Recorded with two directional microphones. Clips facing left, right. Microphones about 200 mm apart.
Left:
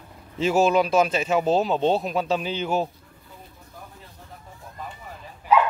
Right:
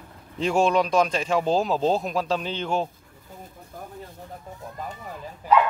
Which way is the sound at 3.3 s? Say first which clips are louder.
Right 4 dB; 45° right (ahead or behind).